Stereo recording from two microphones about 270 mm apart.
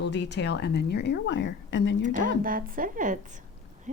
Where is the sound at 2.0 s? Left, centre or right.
Right.